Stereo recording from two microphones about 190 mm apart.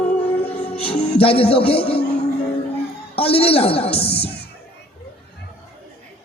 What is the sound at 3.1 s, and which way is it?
Speech, 30° left (ahead or behind).